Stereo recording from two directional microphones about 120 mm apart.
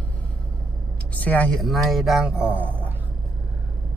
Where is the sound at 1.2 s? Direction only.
15° left (ahead or behind).